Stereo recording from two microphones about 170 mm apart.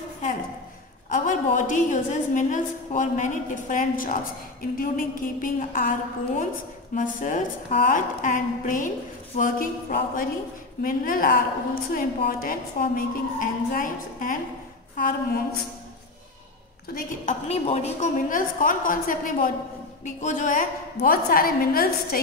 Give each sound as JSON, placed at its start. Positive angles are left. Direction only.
{"t": 1.1, "sound": "a woman's voice", "side_deg": 50}
{"t": 7.0, "sound": "a woman's voice", "side_deg": 50}
{"t": 16.9, "sound": "a woman's voice", "side_deg": 50}